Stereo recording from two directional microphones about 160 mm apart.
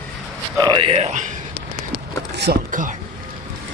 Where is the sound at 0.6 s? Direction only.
20° right (ahead or behind).